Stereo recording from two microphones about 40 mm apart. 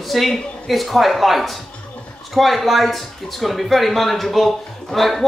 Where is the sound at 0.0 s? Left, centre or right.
Centre.